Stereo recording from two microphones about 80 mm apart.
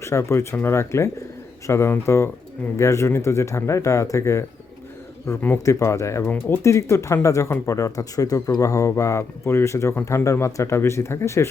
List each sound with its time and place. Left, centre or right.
0.0 s speech: left